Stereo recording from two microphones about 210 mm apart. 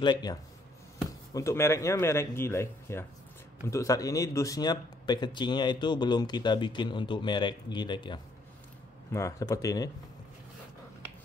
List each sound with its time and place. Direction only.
0.0 s speech: 20° left (ahead or behind)